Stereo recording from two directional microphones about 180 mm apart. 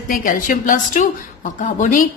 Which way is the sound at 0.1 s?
50° left (ahead or behind).